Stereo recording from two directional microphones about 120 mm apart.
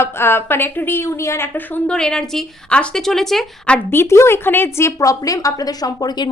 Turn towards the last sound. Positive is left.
turn(degrees=35)  # may be behind; listen again after turning